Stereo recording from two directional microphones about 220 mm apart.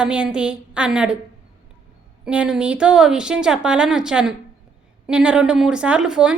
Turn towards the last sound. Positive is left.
turn(degrees=-5)  # may be behind; listen again after turning